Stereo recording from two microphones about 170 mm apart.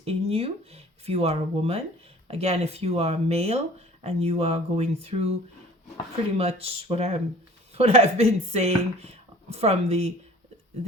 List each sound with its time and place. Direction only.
0.0 s speech: 35° right (ahead or behind)
6.3 s speech: 35° right (ahead or behind)